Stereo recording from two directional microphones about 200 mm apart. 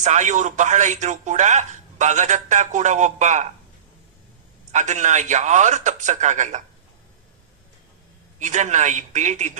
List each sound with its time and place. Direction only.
0.0 s speech: 35° right (ahead or behind)
4.7 s speech: 35° right (ahead or behind)
8.4 s speech: 35° right (ahead or behind)